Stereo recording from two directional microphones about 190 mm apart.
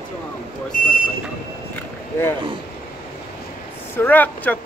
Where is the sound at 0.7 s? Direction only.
45° left (ahead or behind).